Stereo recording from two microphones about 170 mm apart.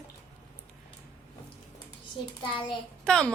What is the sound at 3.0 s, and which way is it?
Speech, 5° left (ahead or behind).